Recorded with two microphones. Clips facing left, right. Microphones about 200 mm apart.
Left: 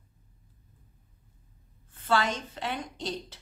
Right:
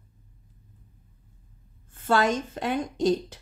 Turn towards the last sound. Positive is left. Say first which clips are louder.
# right 12 dB
turn(degrees=-45)  # may be behind; listen again after turning